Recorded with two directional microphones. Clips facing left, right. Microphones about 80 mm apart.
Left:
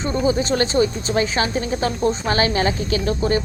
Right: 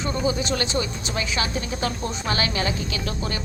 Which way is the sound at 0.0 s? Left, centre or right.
Left.